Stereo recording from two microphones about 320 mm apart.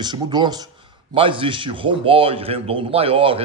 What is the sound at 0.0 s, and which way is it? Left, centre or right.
A man's voice, centre.